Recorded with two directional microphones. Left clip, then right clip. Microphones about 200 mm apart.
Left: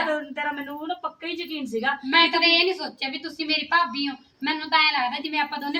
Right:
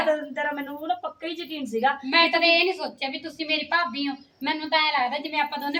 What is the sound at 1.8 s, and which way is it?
A woman's voice, 15° right (ahead or behind).